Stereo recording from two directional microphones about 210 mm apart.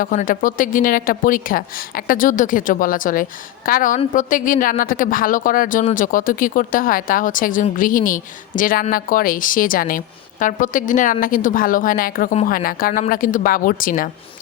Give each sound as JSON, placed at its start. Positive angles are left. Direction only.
{"t": 0.0, "sound": "speech", "side_deg": 40}